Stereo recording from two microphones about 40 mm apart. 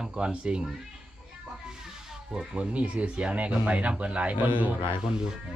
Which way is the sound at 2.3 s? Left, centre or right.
Right.